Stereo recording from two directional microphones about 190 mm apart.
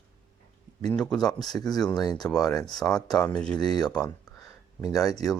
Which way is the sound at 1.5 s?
20° left (ahead or behind).